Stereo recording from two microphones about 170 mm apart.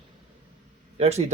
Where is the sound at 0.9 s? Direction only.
40° right (ahead or behind).